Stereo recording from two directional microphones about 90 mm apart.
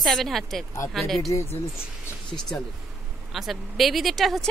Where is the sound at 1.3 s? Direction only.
35° left (ahead or behind).